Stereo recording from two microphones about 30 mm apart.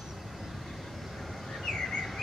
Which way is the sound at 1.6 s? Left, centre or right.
Centre.